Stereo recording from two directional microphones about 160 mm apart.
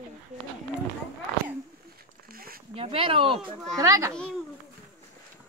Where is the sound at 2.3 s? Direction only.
65° right (ahead or behind).